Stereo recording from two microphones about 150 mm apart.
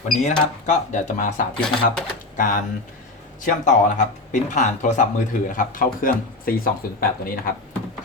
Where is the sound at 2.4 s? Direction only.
60° left (ahead or behind).